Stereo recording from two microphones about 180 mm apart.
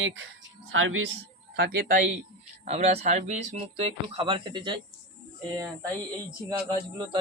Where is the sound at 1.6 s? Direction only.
60° right (ahead or behind).